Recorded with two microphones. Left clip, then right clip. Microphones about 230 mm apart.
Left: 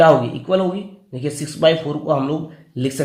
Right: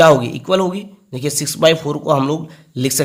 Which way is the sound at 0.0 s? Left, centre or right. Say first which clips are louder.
Right 2 dB; right.